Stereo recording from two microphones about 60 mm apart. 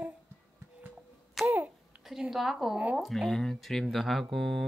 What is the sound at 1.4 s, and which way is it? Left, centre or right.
Babbling, right.